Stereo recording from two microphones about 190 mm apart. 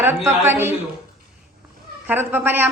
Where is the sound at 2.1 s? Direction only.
10° right (ahead or behind).